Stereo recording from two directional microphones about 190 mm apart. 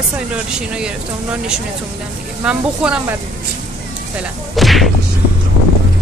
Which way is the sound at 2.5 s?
5° right (ahead or behind).